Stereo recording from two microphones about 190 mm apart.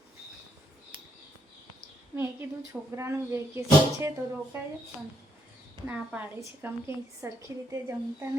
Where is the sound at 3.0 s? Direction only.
15° right (ahead or behind).